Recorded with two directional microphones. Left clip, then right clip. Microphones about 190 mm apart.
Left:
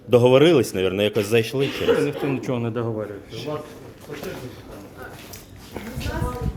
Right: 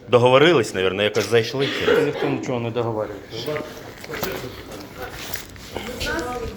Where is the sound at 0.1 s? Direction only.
50° left (ahead or behind); by 2.7 s 65° left (ahead or behind).